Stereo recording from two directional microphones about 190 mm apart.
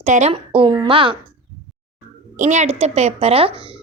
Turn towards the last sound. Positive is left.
turn(degrees=-30)  # may be behind; listen again after turning